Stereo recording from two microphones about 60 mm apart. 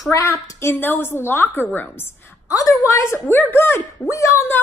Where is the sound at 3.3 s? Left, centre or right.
Left.